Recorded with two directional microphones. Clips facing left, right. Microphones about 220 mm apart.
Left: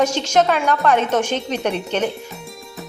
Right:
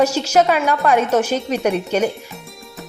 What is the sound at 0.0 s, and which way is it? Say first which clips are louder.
Speech: right 2 dB; 10° right (ahead or behind).